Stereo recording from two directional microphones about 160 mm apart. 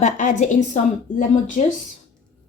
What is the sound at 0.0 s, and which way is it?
A woman's voice, 50° left (ahead or behind).